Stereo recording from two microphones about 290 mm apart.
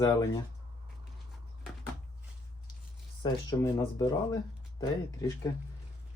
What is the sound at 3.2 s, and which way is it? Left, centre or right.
Speech, centre.